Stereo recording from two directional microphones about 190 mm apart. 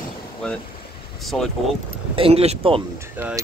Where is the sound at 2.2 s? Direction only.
30° right (ahead or behind).